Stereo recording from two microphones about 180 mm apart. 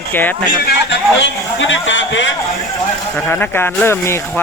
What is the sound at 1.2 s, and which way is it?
A man's voice, 90° left.